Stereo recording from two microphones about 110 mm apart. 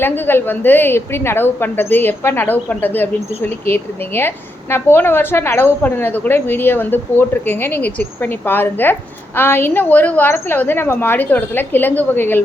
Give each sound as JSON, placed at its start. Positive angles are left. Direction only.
{"t": 0.0, "sound": "a woman's voice", "side_deg": 20}